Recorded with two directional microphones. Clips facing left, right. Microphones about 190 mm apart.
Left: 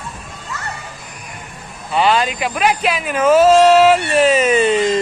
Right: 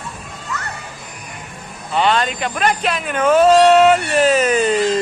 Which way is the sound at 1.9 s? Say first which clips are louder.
Left 1 dB; 5° left (ahead or behind).